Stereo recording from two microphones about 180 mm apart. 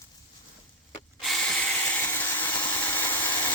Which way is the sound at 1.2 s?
5° left (ahead or behind).